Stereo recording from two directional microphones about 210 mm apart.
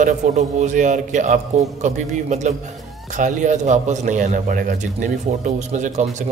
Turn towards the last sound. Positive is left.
turn(degrees=-35)  # may be behind; listen again after turning